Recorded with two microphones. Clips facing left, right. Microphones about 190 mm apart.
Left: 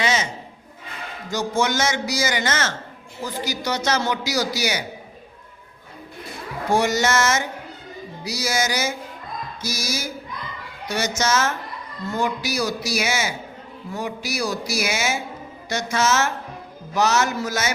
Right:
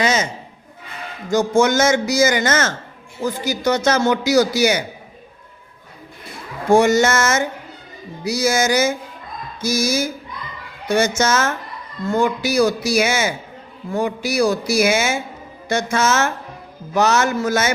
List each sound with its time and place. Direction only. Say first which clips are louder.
0.0 s a sound: right 4 dB; 45° right (ahead or behind)
1.3 s a man's voice: right 7 dB; 50° right (ahead or behind)
6.7 s a man's voice: right 6 dB; 50° right (ahead or behind)